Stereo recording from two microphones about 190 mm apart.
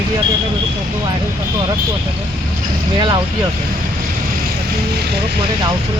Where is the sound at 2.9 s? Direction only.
25° right (ahead or behind).